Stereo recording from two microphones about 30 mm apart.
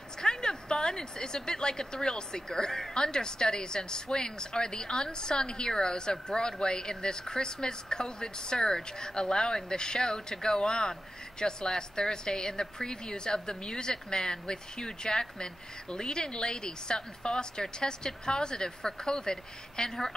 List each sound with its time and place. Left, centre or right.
0.2 s speech: left